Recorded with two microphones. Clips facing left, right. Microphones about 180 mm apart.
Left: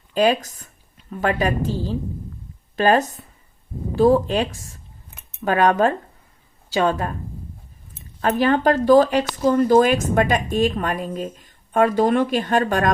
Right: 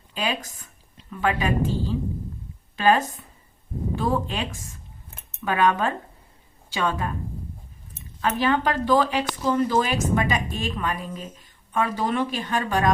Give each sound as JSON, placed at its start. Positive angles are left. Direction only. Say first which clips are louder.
{"t": 0.1, "sound": "a woman's voice", "louder": "left 10 dB", "side_deg": 45}
{"t": 8.2, "sound": "a woman's voice", "louder": "left 5 dB", "side_deg": 45}